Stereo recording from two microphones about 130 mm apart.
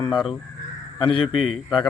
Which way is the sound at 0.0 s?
35° left (ahead or behind).